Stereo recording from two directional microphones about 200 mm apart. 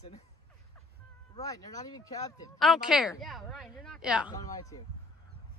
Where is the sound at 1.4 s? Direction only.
15° left (ahead or behind).